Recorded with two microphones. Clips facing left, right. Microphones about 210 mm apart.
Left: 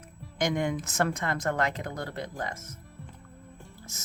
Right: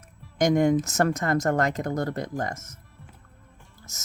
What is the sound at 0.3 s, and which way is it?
Speech, 45° right (ahead or behind).